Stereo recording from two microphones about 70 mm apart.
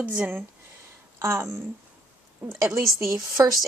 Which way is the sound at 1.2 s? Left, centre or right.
Right.